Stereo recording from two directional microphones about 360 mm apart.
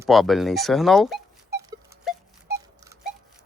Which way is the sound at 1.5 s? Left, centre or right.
Right.